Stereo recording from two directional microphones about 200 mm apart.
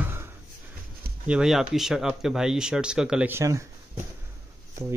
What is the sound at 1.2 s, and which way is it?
Speech, 5° right (ahead or behind).